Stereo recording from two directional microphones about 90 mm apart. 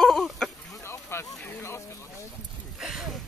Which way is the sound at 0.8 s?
30° left (ahead or behind).